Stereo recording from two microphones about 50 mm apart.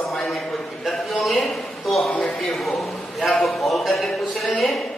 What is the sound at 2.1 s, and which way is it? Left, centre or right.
Speech, centre.